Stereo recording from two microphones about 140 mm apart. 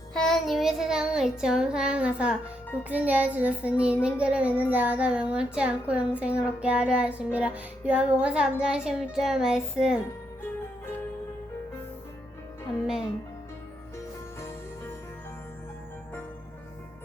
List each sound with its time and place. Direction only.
0.1 s child singing: 5° left (ahead or behind)
2.9 s a woman's voice: 10° right (ahead or behind)